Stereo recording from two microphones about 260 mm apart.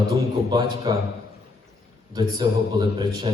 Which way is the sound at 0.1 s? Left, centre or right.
Centre.